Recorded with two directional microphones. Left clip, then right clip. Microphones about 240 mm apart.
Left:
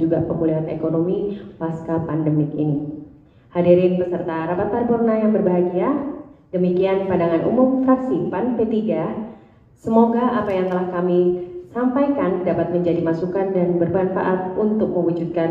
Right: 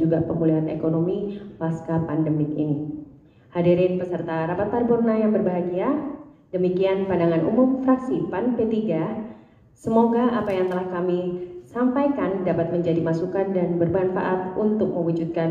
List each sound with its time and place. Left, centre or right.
0.1 s a woman's voice: right